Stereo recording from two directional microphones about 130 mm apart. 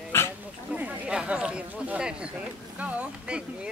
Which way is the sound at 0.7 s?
10° right (ahead or behind).